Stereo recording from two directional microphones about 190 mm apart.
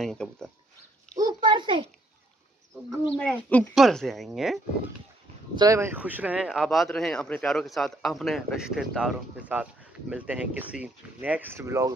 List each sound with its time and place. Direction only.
0.0 s speech: centre (ahead or behind)
1.1 s a sound: 20° right (ahead or behind)
3.2 s speech: 10° left (ahead or behind)
5.6 s speech: 15° right (ahead or behind)